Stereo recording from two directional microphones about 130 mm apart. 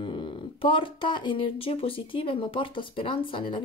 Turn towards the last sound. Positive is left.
turn(degrees=40)  # may be behind; listen again after turning